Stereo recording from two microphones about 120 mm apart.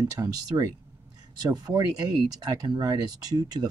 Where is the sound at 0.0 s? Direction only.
30° right (ahead or behind).